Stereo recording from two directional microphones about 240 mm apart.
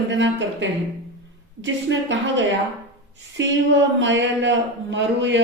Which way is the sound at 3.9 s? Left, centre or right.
Right.